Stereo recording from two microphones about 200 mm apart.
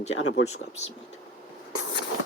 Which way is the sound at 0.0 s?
30° left (ahead or behind).